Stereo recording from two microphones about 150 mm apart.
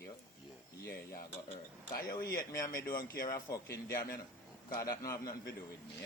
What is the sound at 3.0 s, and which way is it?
Speech, 75° left (ahead or behind).